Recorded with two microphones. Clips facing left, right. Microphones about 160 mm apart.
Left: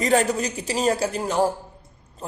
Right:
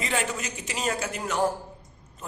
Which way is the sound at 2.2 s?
30° left (ahead or behind).